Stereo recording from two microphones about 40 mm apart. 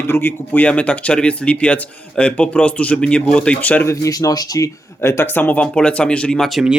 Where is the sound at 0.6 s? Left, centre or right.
Left.